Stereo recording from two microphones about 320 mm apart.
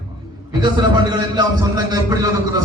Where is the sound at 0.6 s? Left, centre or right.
Centre.